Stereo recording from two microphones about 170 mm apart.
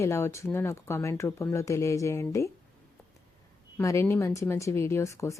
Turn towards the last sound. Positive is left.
turn(degrees=15)  # may be behind; listen again after turning